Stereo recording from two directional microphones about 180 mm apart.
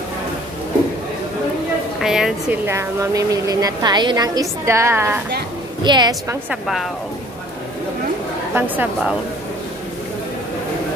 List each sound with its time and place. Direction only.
2.0 s a woman's voice: centre (ahead or behind); by 6.3 s 20° right (ahead or behind)
6.5 s speech: centre (ahead or behind)
8.5 s speech: 10° right (ahead or behind)